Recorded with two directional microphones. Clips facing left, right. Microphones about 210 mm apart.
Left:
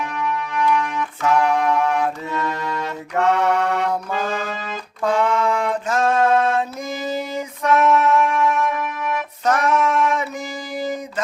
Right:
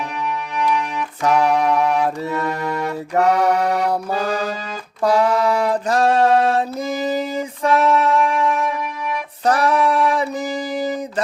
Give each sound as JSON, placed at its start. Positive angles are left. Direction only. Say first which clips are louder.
{"t": 1.3, "sound": "music", "louder": "right 2 dB", "side_deg": -15}
{"t": 3.2, "sound": "music", "louder": "right 2 dB", "side_deg": -35}
{"t": 5.0, "sound": "a sound", "louder": "right 3 dB", "side_deg": -35}